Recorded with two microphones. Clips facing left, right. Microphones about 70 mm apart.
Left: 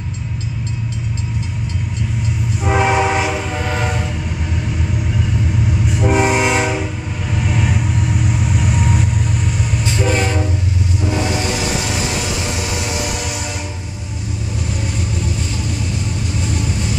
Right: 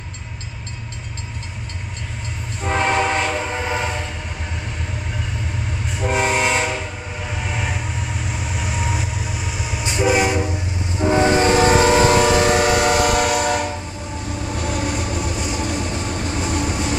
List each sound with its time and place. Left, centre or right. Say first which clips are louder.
2.6 s train: left 3 dB; centre
3.4 s train: left 1 dB; centre
3.8 s train: left 3 dB; centre
5.9 s train: left 4 dB; centre
7.3 s vehicle: left 7 dB; centre
9.8 s train: right 2 dB; centre
11.0 s train: right 7 dB; right
14.5 s vehicle: right 3 dB; right
15.3 s vehicle: right 1 dB; centre
15.6 s vehicle: even; right